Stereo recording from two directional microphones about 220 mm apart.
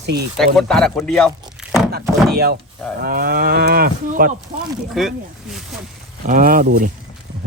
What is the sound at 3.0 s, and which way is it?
Cattle, 40° right (ahead or behind).